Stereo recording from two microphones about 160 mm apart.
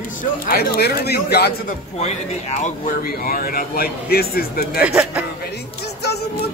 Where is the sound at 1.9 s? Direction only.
45° left (ahead or behind); by 4.8 s 70° left (ahead or behind).